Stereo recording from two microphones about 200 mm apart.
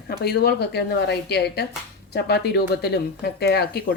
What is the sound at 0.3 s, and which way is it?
Speech, 55° left (ahead or behind).